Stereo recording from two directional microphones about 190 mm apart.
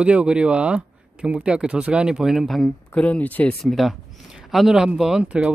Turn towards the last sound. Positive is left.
turn(degrees=-5)  # may be behind; listen again after turning